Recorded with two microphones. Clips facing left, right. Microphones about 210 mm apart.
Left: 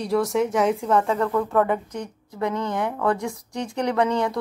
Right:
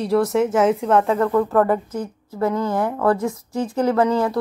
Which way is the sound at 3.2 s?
5° right (ahead or behind).